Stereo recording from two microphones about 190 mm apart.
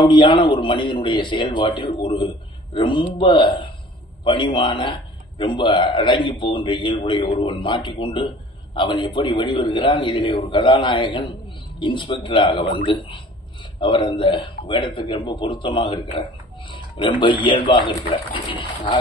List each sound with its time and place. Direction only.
0.1 s a man's voice: 25° left (ahead or behind)